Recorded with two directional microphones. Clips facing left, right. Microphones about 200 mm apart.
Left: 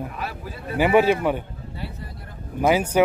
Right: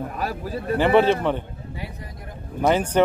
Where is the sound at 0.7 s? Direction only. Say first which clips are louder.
Even; 10° left (ahead or behind).